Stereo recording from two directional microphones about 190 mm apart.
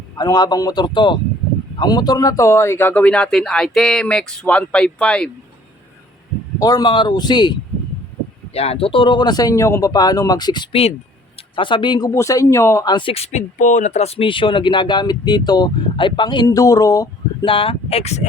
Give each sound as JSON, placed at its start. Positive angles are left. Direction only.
{"t": 0.2, "sound": "speech", "side_deg": 20}
{"t": 6.6, "sound": "speech", "side_deg": 20}
{"t": 8.5, "sound": "speech", "side_deg": 30}